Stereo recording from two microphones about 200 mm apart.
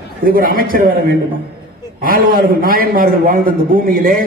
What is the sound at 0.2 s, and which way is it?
A man's voice, 45° right (ahead or behind).